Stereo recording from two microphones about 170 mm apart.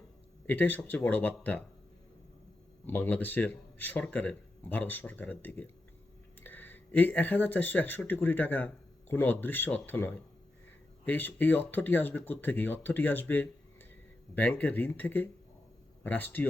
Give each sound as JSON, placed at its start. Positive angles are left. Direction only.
{"t": 0.4, "sound": "speech", "side_deg": 10}
{"t": 2.8, "sound": "speech", "side_deg": 10}